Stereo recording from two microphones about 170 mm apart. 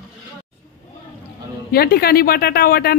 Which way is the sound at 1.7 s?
65° left (ahead or behind).